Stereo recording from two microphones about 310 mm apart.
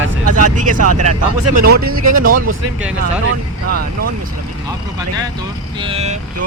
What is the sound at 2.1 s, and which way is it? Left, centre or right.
Speech, right.